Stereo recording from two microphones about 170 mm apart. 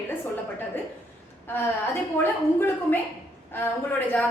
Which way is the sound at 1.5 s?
10° left (ahead or behind).